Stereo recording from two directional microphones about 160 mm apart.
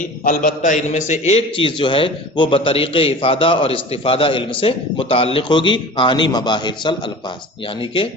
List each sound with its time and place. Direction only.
0.3 s a man's voice: 55° left (ahead or behind); by 6.9 s 30° left (ahead or behind)